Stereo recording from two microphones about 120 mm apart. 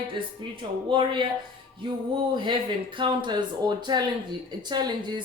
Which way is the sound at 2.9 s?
40° right (ahead or behind).